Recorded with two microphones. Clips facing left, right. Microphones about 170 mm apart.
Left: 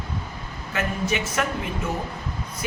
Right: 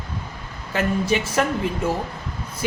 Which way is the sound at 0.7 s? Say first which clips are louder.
Right 5 dB; 30° right (ahead or behind).